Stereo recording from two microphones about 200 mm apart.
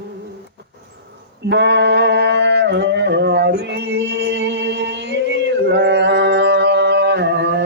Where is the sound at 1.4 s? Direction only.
60° right (ahead or behind).